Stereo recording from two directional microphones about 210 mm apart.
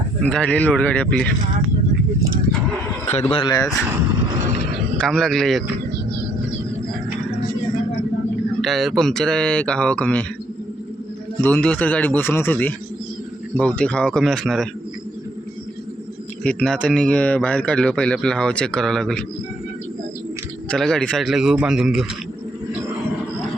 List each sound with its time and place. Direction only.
0.2 s speech: 5° left (ahead or behind)
3.3 s a man's voice: 20° left (ahead or behind)
4.9 s speech: 5° left (ahead or behind)
8.6 s speech: centre (ahead or behind)
11.3 s a man's voice: 10° left (ahead or behind)
16.4 s speech: 5° left (ahead or behind)
20.7 s speech: centre (ahead or behind)